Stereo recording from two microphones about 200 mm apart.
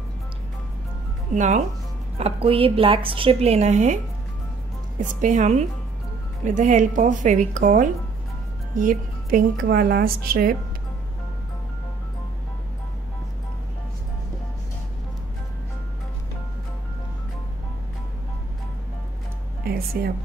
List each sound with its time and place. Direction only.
1.3 s a woman's voice: 35° right (ahead or behind)
5.0 s speech: 40° right (ahead or behind)
19.9 s speech: 50° right (ahead or behind)